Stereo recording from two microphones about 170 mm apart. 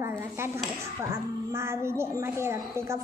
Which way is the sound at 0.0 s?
15° right (ahead or behind).